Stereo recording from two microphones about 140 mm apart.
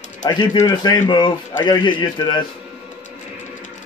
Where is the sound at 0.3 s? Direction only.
30° left (ahead or behind).